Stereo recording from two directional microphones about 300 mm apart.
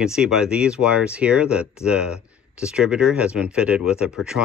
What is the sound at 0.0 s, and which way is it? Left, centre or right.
Speech, centre.